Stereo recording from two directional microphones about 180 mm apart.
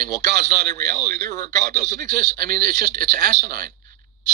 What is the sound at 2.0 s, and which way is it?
A man's voice, 50° right (ahead or behind).